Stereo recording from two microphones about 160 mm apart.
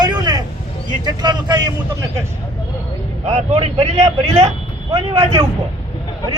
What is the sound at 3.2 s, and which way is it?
Speech, 45° right (ahead or behind).